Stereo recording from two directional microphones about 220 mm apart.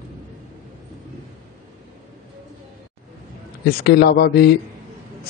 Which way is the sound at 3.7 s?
45° left (ahead or behind).